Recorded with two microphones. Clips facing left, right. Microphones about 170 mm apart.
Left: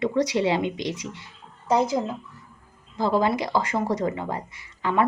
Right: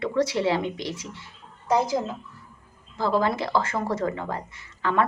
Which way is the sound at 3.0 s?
15° left (ahead or behind).